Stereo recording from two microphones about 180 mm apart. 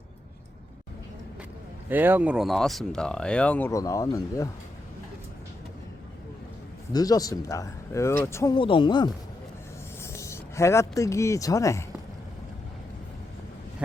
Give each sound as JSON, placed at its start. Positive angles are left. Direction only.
{"t": 1.9, "sound": "speech", "side_deg": -10}
{"t": 6.9, "sound": "speech", "side_deg": 20}
{"t": 8.5, "sound": "speech", "side_deg": 30}